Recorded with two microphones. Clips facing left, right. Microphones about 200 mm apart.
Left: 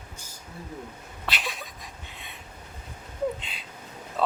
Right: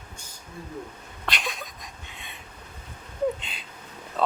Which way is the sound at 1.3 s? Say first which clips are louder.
Right 1 dB; 5° left (ahead or behind).